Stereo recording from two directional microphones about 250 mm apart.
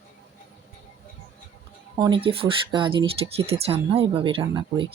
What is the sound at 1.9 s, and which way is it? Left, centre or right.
Speech, centre.